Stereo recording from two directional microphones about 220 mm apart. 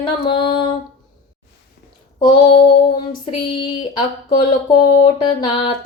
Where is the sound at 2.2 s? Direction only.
20° left (ahead or behind).